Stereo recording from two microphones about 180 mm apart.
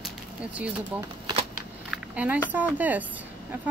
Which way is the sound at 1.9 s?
10° right (ahead or behind).